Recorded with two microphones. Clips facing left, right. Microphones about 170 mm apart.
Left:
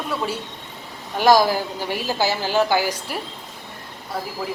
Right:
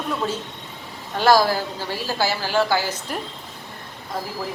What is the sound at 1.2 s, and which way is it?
A woman's voice, 15° left (ahead or behind).